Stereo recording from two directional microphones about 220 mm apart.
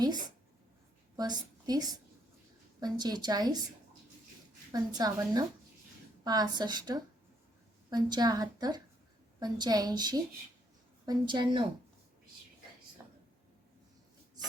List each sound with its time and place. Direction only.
0.0 s a woman's voice: 20° right (ahead or behind)
4.7 s a woman's voice: 15° right (ahead or behind)